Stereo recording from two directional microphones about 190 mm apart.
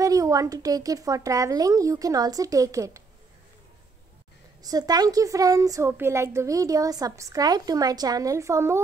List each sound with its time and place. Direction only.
0.0 s a woman's voice: 15° right (ahead or behind)
4.6 s a woman's voice: 20° right (ahead or behind)